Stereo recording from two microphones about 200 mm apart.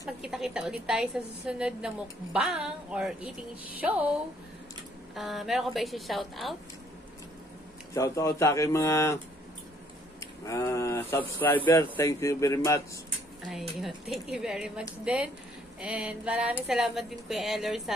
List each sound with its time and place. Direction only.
0.0 s a woman's voice: centre (ahead or behind)
7.9 s speech: 15° left (ahead or behind)
10.2 s speech: 15° left (ahead or behind)
13.5 s a woman's voice: centre (ahead or behind)